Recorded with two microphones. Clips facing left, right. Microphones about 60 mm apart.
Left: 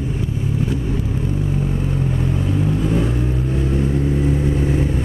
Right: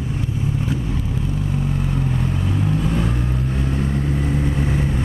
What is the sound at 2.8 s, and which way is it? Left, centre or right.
Vehicle, centre.